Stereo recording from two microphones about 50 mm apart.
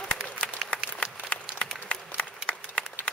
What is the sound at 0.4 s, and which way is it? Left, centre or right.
Applause, left.